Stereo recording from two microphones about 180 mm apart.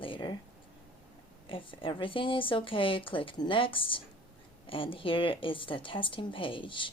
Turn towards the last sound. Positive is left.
turn(degrees=25)  # may be behind; listen again after turning